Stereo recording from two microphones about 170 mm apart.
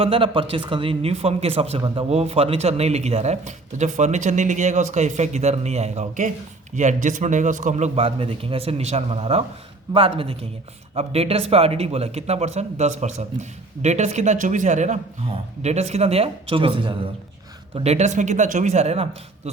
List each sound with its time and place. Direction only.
0.0 s speech: 30° right (ahead or behind)